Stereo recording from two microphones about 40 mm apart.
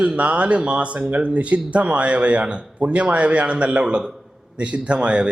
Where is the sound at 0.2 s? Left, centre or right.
Right.